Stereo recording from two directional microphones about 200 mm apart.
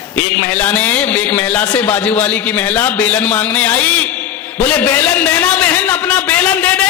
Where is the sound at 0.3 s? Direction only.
5° left (ahead or behind).